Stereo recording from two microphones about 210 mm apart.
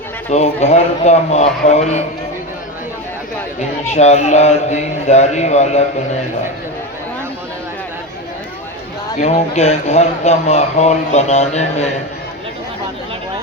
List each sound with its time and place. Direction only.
0.3 s speech: 30° left (ahead or behind)
3.8 s speech: 30° left (ahead or behind)
9.1 s speech: 30° left (ahead or behind)